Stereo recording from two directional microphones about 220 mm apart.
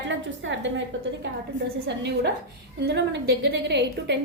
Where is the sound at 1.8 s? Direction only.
50° right (ahead or behind).